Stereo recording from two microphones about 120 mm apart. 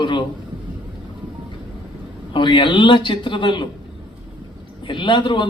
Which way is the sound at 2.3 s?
40° left (ahead or behind).